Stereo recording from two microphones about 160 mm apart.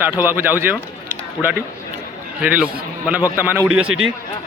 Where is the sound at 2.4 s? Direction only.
10° right (ahead or behind).